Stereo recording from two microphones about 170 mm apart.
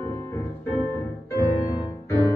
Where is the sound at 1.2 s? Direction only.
15° left (ahead or behind).